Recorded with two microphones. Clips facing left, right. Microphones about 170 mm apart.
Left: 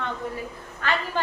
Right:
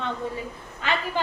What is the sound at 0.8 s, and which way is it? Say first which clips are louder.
Speech: even; 15° right (ahead or behind).